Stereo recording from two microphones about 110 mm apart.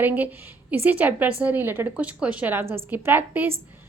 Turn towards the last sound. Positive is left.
turn(degrees=-15)  # may be behind; listen again after turning